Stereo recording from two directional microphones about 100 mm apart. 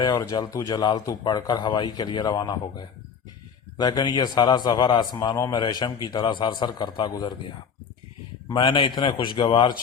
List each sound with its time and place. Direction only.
0.0 s a man's voice: 40° left (ahead or behind)
8.5 s a man's voice: 60° left (ahead or behind)